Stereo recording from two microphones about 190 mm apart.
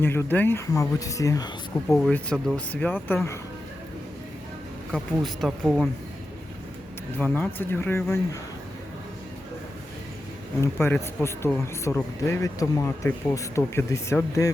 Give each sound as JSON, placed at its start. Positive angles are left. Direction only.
{"t": 0.0, "sound": "speech", "side_deg": 10}
{"t": 2.0, "sound": "speech", "side_deg": 5}
{"t": 4.9, "sound": "speech", "side_deg": 0}
{"t": 7.3, "sound": "speech", "side_deg": 10}
{"t": 10.6, "sound": "speech", "side_deg": 10}